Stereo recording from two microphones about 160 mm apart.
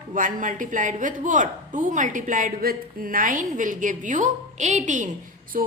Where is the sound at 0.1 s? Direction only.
55° right (ahead or behind).